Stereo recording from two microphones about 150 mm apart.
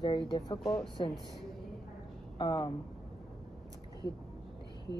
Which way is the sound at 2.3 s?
30° left (ahead or behind).